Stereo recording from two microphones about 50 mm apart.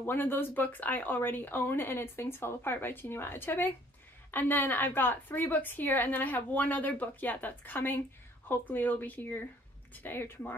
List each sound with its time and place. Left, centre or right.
0.0 s a woman's voice: left